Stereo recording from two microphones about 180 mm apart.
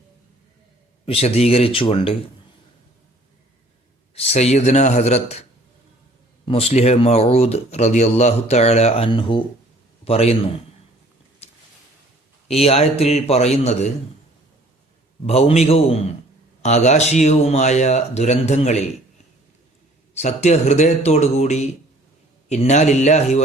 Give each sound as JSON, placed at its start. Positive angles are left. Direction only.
{"t": 1.0, "sound": "speech", "side_deg": 35}
{"t": 4.1, "sound": "speech", "side_deg": 35}
{"t": 11.4, "sound": "a sound", "side_deg": 35}
{"t": 12.5, "sound": "speech", "side_deg": 35}
{"t": 15.3, "sound": "speech", "side_deg": 35}
{"t": 20.1, "sound": "speech", "side_deg": 40}